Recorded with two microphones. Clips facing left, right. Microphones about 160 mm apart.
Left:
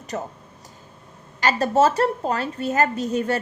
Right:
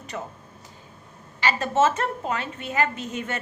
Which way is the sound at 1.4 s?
40° left (ahead or behind).